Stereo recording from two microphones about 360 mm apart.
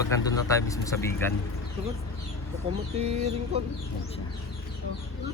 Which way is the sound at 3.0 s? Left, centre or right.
Centre.